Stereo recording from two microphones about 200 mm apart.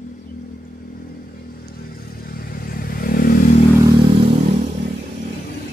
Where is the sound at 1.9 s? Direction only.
50° left (ahead or behind).